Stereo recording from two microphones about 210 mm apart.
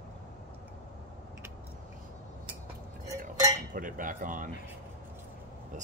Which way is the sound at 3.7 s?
40° right (ahead or behind).